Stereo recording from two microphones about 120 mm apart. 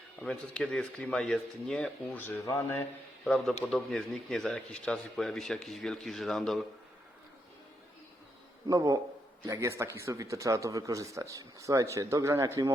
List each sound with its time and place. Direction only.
0.2 s speech: 10° left (ahead or behind)
2.2 s speech: 20° left (ahead or behind)
3.2 s speech: 5° left (ahead or behind)
8.6 s speech: 30° right (ahead or behind)